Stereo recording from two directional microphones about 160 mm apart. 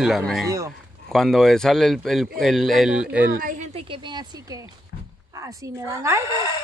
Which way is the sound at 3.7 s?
35° right (ahead or behind).